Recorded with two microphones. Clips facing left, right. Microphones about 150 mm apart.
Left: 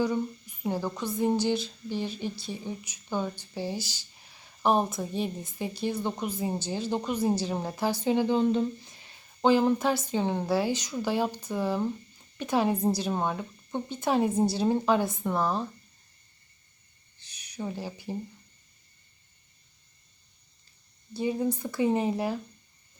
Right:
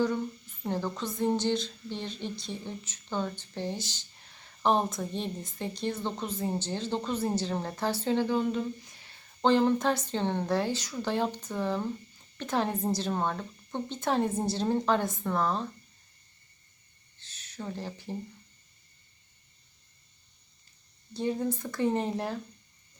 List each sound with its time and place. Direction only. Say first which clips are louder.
0.0 s a woman's voice: left 1 dB; 10° left (ahead or behind)
8.4 s speech: left 4 dB; 25° left (ahead or behind)
9.4 s a woman's voice: left 1 dB; 5° left (ahead or behind)
17.2 s a sound: left 4 dB; 15° left (ahead or behind)
21.1 s a woman's voice: left 2 dB; 10° left (ahead or behind)